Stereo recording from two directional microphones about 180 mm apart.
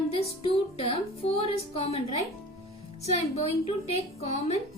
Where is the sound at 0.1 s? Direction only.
30° left (ahead or behind).